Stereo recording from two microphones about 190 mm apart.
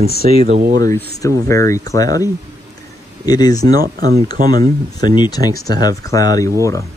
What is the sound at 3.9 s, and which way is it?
Speech, 50° right (ahead or behind).